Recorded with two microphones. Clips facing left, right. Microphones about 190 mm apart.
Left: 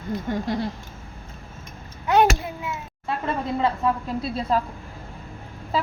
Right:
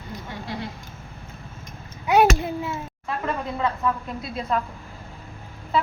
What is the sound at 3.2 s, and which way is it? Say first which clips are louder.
A woman's voice: left 2 dB; 30° left (ahead or behind).